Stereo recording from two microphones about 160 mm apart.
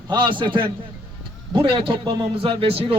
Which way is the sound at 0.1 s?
30° right (ahead or behind).